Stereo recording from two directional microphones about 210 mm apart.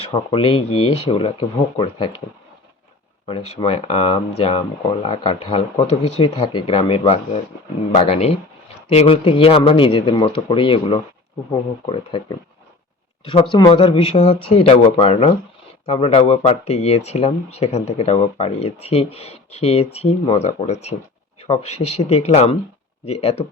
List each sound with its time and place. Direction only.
0.0 s speech: 25° left (ahead or behind)
3.6 s speech: 30° left (ahead or behind)